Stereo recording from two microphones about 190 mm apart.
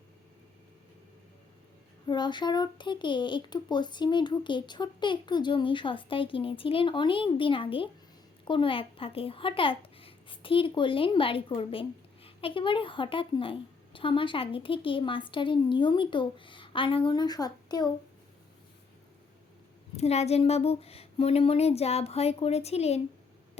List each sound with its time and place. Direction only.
2.0 s speech: 25° left (ahead or behind)
20.0 s speech: 35° left (ahead or behind)